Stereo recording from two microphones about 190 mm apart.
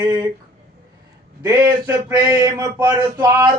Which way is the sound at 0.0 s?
20° right (ahead or behind).